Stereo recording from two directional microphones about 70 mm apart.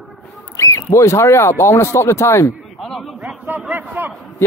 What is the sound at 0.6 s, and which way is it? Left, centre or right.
Speech, left.